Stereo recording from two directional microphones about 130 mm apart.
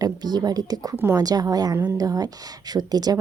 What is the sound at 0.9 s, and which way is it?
Speech, 20° right (ahead or behind).